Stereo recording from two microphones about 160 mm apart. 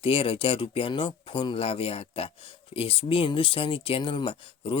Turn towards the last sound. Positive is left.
turn(degrees=35)  # may be behind; listen again after turning